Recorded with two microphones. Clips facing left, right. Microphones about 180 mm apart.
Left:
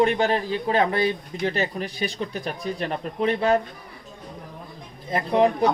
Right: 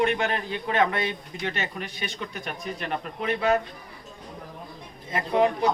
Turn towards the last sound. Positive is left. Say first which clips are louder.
# left 3 dB
turn(degrees=35)  # may be behind; listen again after turning